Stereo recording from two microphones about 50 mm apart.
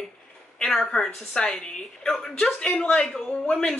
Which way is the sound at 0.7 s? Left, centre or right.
Centre.